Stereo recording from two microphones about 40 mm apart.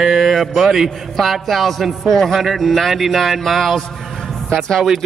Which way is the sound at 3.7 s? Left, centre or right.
Centre.